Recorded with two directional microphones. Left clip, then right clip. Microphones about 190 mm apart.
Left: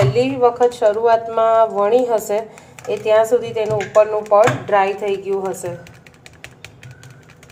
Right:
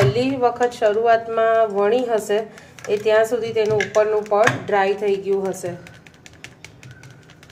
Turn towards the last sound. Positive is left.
turn(degrees=-10)  # may be behind; listen again after turning